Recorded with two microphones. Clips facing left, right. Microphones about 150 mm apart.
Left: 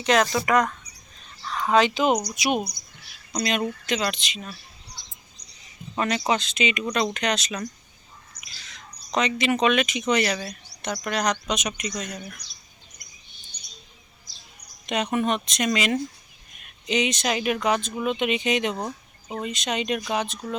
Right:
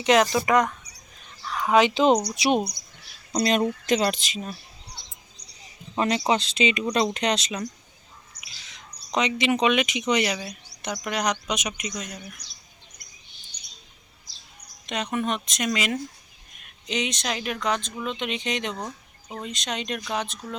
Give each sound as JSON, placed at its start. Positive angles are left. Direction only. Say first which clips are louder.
{"t": 0.0, "sound": "speech", "louder": "right 2 dB", "side_deg": -20}
{"t": 1.5, "sound": "a sound", "louder": "right 1 dB", "side_deg": -10}
{"t": 2.3, "sound": "speech", "louder": "right 2 dB", "side_deg": -30}
{"t": 6.0, "sound": "speech", "louder": "right 1 dB", "side_deg": -25}
{"t": 14.8, "sound": "speech", "louder": "left 3 dB", "side_deg": 5}